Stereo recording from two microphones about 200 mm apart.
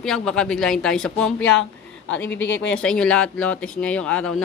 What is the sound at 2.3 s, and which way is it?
Speech, 70° left (ahead or behind).